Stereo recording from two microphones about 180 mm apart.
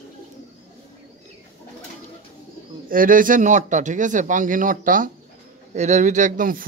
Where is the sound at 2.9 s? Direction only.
50° right (ahead or behind).